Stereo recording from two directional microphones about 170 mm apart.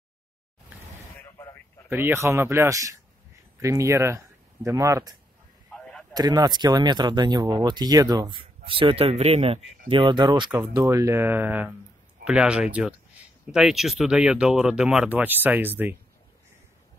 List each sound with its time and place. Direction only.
1.9 s speech: 10° right (ahead or behind)
6.1 s speech: 25° right (ahead or behind)